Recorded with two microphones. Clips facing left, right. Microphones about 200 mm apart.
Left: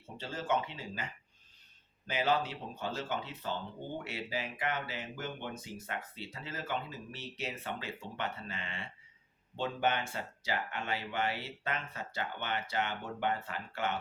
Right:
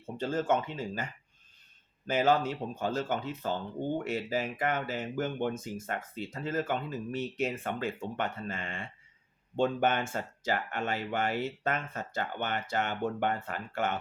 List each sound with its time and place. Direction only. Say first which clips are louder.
0.2 s speech: right 5 dB; 50° right (ahead or behind)
2.0 s speech: right 5 dB; 45° right (ahead or behind)